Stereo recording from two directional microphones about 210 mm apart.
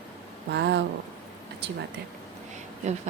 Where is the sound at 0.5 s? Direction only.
55° right (ahead or behind).